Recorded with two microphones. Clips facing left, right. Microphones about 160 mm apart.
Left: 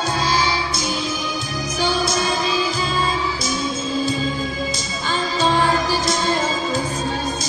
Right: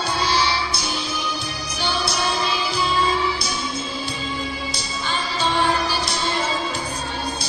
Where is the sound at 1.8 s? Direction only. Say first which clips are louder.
Left 4 dB; 45° left (ahead or behind).